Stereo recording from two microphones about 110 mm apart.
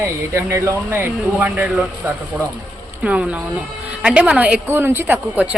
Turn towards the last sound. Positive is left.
turn(degrees=-15)  # may be behind; listen again after turning